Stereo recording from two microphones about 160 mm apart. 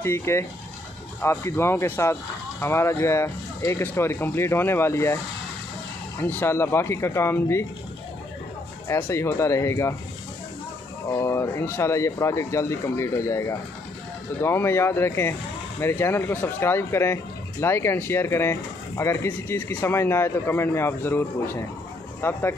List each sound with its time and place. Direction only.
0.0 s speech: 15° left (ahead or behind)
6.2 s speech: 15° left (ahead or behind)
8.8 s speech: 15° left (ahead or behind)
11.1 s speech: 20° left (ahead or behind)